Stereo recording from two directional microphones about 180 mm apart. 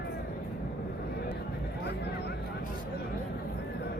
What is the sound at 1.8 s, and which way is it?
Vehicle, 65° left (ahead or behind).